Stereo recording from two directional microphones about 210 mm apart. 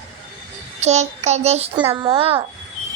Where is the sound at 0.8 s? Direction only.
30° right (ahead or behind).